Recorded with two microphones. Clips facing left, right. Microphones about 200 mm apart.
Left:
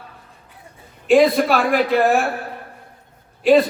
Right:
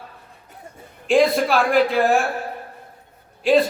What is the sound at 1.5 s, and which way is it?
Speech, 55° left (ahead or behind).